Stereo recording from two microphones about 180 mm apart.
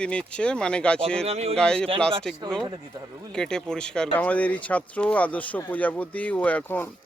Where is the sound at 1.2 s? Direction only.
35° right (ahead or behind).